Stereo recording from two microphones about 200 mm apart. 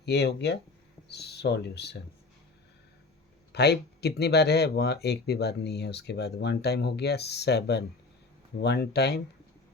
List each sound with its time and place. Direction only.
0.0 s speech: 55° left (ahead or behind)
3.5 s speech: 55° left (ahead or behind)